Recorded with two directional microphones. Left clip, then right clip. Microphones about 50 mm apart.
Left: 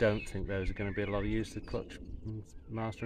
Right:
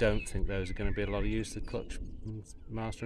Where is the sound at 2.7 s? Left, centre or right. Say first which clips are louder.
Left 1 dB; right.